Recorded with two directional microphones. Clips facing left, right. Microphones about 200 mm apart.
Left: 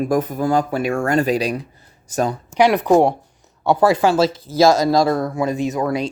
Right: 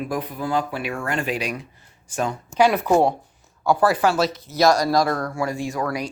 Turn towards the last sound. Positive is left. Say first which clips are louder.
# left 5 dB
turn(degrees=20)  # may be behind; listen again after turning